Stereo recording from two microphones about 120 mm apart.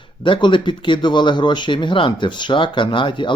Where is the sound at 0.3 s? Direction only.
45° left (ahead or behind).